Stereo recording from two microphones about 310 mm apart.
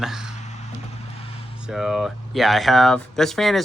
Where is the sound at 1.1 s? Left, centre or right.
Centre.